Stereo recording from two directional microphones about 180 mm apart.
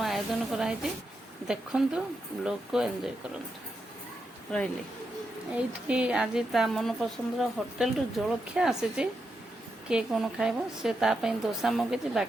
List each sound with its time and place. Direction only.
0.0 s a woman's voice: centre (ahead or behind)
5.5 s a woman's voice: 5° right (ahead or behind)